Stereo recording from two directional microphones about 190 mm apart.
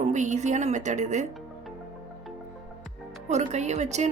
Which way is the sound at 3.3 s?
35° right (ahead or behind).